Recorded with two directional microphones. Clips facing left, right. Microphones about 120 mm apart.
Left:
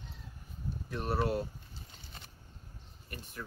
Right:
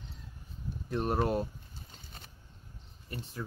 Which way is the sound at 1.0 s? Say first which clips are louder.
Right 2 dB; 40° right (ahead or behind).